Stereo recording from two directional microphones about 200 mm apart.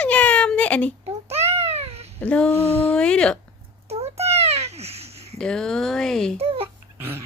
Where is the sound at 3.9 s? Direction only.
30° right (ahead or behind).